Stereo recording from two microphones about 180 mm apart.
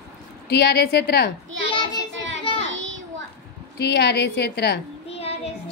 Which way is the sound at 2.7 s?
90° right.